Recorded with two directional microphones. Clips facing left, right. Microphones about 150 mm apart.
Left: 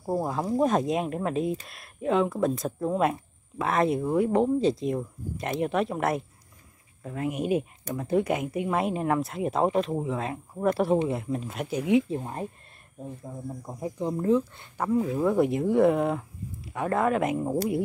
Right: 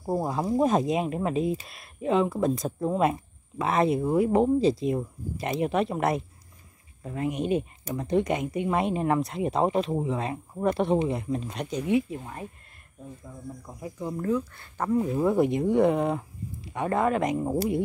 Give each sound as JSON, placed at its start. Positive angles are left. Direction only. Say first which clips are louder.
{"t": 0.1, "sound": "speech", "louder": "right 1 dB", "side_deg": -5}
{"t": 12.1, "sound": "speech", "louder": "left 5 dB", "side_deg": 35}
{"t": 14.8, "sound": "speech", "louder": "even", "side_deg": 0}